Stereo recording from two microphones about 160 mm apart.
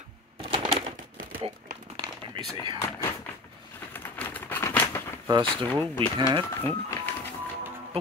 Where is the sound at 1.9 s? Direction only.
30° right (ahead or behind).